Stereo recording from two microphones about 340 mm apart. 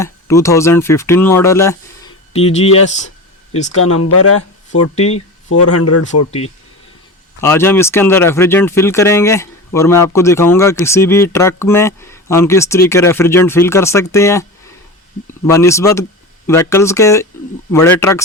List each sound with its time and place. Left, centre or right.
0.0 s speech: centre
2.3 s speech: centre
3.8 s speech: left
4.9 s speech: centre
5.5 s speech: left
7.4 s speech: centre
15.4 s speech: centre